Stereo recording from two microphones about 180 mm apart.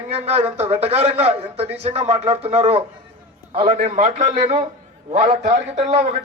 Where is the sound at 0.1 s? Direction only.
35° right (ahead or behind).